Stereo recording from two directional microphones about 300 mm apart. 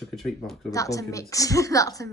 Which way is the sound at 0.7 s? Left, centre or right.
Centre.